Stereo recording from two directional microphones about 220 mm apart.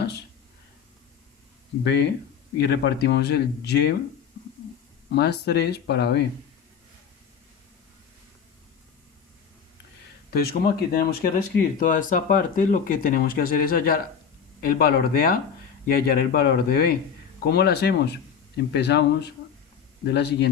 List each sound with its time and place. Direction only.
1.8 s speech: 50° left (ahead or behind)
5.1 s speech: 50° left (ahead or behind)
10.3 s speech: 45° left (ahead or behind)